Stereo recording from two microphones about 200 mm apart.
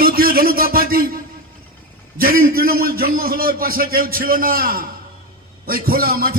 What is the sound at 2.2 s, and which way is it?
A man's voice, 45° right (ahead or behind).